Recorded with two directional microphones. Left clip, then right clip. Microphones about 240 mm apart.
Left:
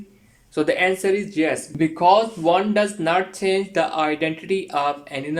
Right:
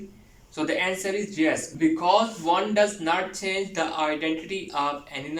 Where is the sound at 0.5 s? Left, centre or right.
Left.